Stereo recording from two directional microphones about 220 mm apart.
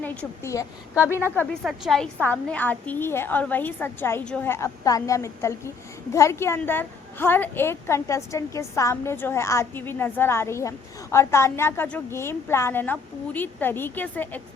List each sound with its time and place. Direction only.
0.0 s a woman's voice: 5° left (ahead or behind)
0.9 s a woman's voice: 5° right (ahead or behind)